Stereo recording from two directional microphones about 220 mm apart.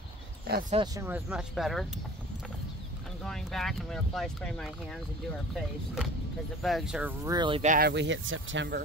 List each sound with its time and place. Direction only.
0.5 s speech: 40° right (ahead or behind)
1.0 s speech: 5° right (ahead or behind)
3.3 s speech: centre (ahead or behind)
6.6 s speech: centre (ahead or behind)
7.3 s speech: 20° right (ahead or behind)
7.6 s speech: 35° right (ahead or behind)
7.9 s speech: 55° right (ahead or behind)